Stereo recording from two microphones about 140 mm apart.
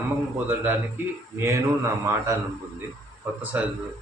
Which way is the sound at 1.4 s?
20° right (ahead or behind).